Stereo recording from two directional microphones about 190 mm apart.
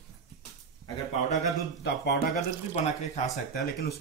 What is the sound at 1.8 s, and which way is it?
Speech, 60° left (ahead or behind).